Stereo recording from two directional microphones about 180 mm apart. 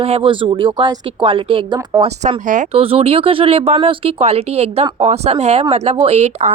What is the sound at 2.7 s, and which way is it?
A woman's voice, 30° right (ahead or behind).